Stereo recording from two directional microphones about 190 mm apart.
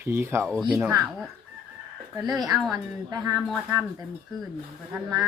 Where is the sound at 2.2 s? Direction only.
Centre (ahead or behind).